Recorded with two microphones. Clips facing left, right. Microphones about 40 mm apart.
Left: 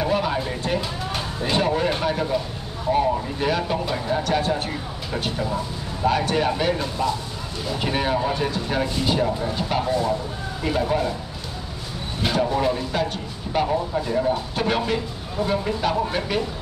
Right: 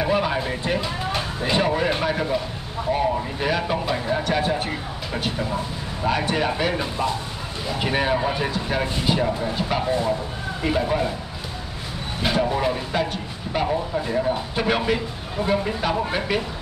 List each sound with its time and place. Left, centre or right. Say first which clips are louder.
0.0 s a sound: right 1 dB; centre
2.9 s speech: left 2 dB; centre
9.8 s speech: even; centre
12.2 s speech: even; centre